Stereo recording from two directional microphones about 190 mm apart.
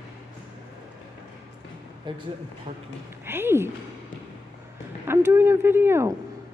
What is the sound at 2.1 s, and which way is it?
Speech, 25° right (ahead or behind).